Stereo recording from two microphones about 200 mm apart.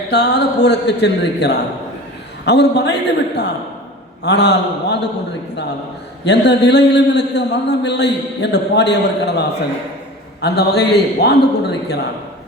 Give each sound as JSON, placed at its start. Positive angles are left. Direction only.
{"t": 0.1, "sound": "a man's voice", "side_deg": 55}
{"t": 6.2, "sound": "a man's voice", "side_deg": 60}